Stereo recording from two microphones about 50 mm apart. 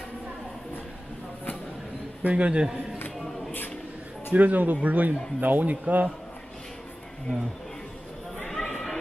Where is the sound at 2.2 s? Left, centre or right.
Right.